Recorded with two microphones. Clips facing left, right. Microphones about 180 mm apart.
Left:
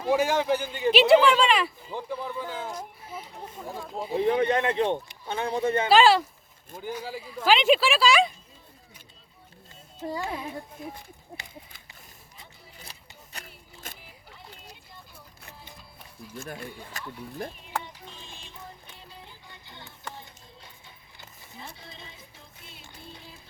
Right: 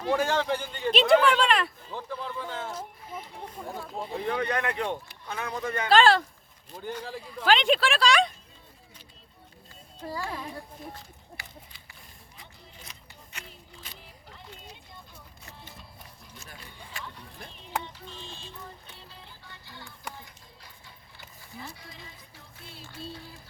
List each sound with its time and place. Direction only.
0.0 s speech: 10° left (ahead or behind)
1.9 s a sound: 15° left (ahead or behind)
4.1 s speech: 20° left (ahead or behind)
5.9 s speech: 5° left (ahead or behind)
10.1 s speech: 20° left (ahead or behind)
12.8 s a sound: 35° left (ahead or behind)
13.4 s a sound: 50° left (ahead or behind)
16.4 s speech: 50° left (ahead or behind)
16.9 s speech: 40° left (ahead or behind)
19.2 s music: 20° left (ahead or behind)
21.2 s a sound: 25° left (ahead or behind)
22.5 s speech: 20° left (ahead or behind)